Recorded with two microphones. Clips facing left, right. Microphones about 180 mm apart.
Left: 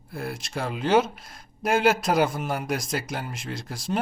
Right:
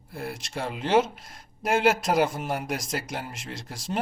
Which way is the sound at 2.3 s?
25° right (ahead or behind).